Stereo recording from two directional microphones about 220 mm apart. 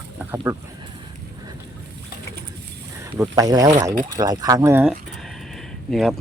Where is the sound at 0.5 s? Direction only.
15° right (ahead or behind).